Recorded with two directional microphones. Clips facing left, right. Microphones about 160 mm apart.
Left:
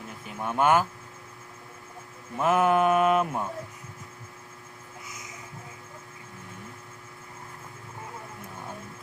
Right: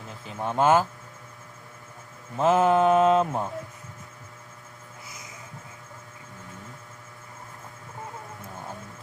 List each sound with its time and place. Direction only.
0.1 s speech: 25° right (ahead or behind)
2.4 s mantra: 25° right (ahead or behind)